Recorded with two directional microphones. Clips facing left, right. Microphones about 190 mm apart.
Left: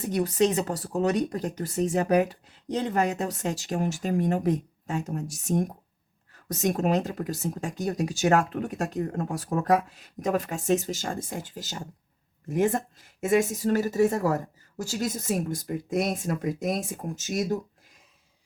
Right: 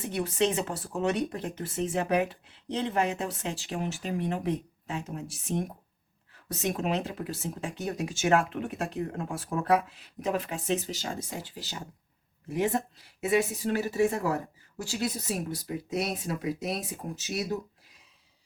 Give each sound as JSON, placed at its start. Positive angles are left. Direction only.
{"t": 0.0, "sound": "speech", "side_deg": 40}